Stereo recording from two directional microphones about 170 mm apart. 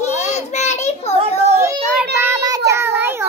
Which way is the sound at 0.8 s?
40° left (ahead or behind).